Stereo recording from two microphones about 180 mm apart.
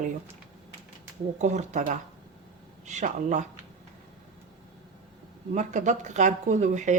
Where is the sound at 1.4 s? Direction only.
40° right (ahead or behind).